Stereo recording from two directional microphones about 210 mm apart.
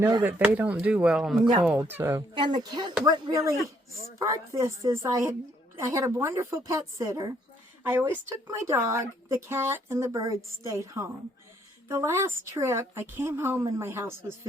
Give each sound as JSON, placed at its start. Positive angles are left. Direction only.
{"t": 0.0, "sound": "speech", "side_deg": -10}
{"t": 2.3, "sound": "speech", "side_deg": -20}